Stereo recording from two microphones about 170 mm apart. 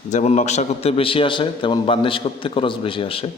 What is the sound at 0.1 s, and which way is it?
A man's voice, 45° left (ahead or behind).